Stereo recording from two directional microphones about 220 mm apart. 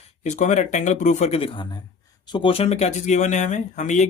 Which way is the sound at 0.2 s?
30° left (ahead or behind).